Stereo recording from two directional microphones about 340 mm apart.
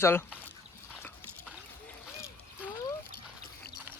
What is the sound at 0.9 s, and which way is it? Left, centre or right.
Dog, centre.